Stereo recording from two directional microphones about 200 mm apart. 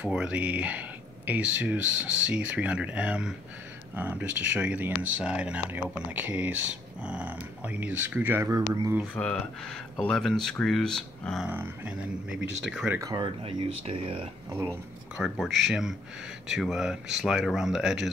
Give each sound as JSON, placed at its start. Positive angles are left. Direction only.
{"t": 0.0, "sound": "speech", "side_deg": -5}
{"t": 9.1, "sound": "speech", "side_deg": 5}
{"t": 11.4, "sound": "speech", "side_deg": -10}
{"t": 13.0, "sound": "speech", "side_deg": -20}
{"t": 14.7, "sound": "speech", "side_deg": 0}